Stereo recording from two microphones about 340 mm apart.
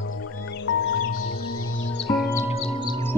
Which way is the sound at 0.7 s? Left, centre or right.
Left.